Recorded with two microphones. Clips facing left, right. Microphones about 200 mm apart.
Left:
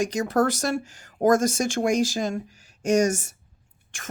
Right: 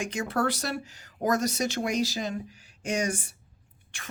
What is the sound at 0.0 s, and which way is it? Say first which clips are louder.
Speech: left 6 dB; 40° left (ahead or behind).